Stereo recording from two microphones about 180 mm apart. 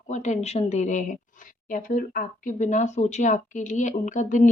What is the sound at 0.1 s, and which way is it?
A woman's voice, 40° left (ahead or behind).